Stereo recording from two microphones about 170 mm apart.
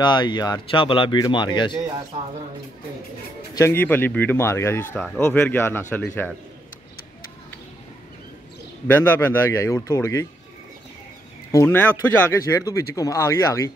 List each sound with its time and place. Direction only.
0.0 s speech: 25° left (ahead or behind)
3.5 s speech: 15° left (ahead or behind)
8.8 s speech: 10° left (ahead or behind)
11.5 s speech: 10° left (ahead or behind)